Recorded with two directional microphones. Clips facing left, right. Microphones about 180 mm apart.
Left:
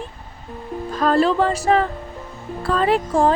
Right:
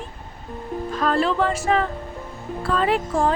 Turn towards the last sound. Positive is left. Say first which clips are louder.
# left 3 dB
turn(degrees=35)  # may be behind; listen again after turning